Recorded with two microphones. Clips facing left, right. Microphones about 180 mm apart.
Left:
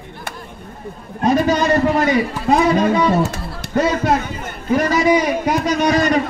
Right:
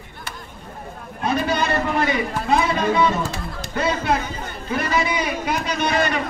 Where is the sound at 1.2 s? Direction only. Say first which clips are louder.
Left 6 dB; 40° left (ahead or behind).